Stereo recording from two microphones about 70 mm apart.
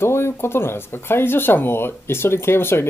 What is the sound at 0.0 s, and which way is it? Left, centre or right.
Speech, left.